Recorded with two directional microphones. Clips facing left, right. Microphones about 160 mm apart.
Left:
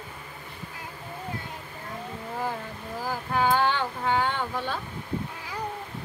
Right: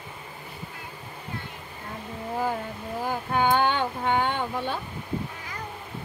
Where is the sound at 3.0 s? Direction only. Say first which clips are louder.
Right 1 dB; 25° right (ahead or behind).